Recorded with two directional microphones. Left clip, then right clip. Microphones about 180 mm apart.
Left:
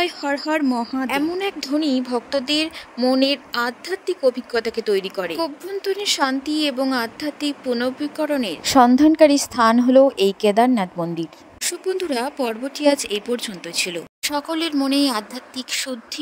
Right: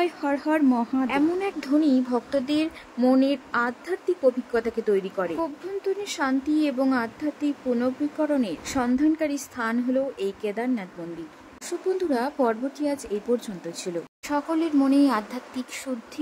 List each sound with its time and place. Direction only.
0.0 s speech: 50° left (ahead or behind)
1.0 s speech: 50° left (ahead or behind)